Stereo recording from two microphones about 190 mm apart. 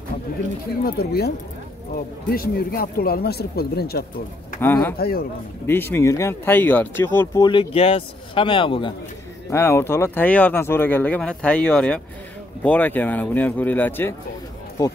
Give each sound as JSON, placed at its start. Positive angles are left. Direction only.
{"t": 0.8, "sound": "speech", "side_deg": 55}
{"t": 4.6, "sound": "speech", "side_deg": 10}
{"t": 4.9, "sound": "speech", "side_deg": 55}
{"t": 5.7, "sound": "speech", "side_deg": 10}
{"t": 7.4, "sound": "a man's voice", "side_deg": 30}
{"t": 9.5, "sound": "speech", "side_deg": 15}